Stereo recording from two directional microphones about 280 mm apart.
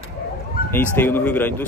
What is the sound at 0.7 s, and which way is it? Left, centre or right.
Speech, centre.